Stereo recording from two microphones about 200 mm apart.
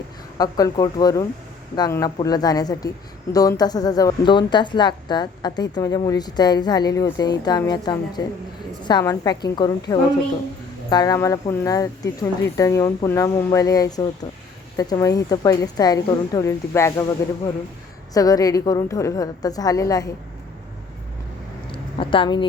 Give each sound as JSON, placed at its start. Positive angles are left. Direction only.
{"t": 0.3, "sound": "a woman's voice", "side_deg": 20}
{"t": 10.8, "sound": "a woman's voice", "side_deg": 20}
{"t": 18.1, "sound": "speech", "side_deg": 20}
{"t": 21.7, "sound": "a sound", "side_deg": 25}